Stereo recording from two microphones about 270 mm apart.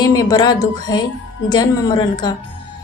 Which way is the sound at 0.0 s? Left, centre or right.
Centre.